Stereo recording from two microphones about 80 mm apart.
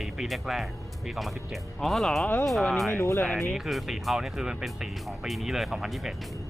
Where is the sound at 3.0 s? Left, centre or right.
Left.